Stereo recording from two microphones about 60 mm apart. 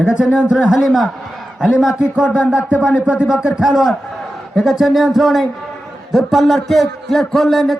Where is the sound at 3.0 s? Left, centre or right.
Right.